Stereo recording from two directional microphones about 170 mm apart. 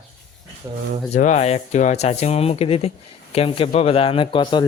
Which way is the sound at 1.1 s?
45° left (ahead or behind).